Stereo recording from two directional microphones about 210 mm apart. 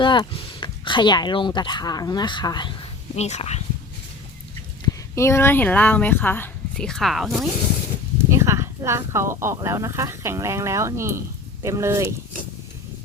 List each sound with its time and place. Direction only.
0.0 s speech: 25° left (ahead or behind)
3.2 s speech: 30° left (ahead or behind)
5.1 s speech: 15° left (ahead or behind)
8.3 s speech: 15° right (ahead or behind)